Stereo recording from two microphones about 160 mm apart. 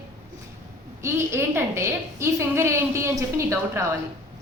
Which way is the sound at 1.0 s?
15° right (ahead or behind).